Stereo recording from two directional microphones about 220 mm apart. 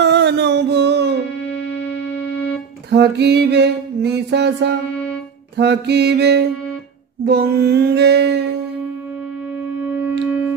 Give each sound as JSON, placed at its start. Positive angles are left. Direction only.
{"t": 0.0, "sound": "music", "side_deg": -50}
{"t": 2.9, "sound": "music", "side_deg": -50}